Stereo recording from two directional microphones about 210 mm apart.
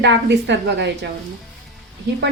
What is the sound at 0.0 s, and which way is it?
Speech, 55° right (ahead or behind).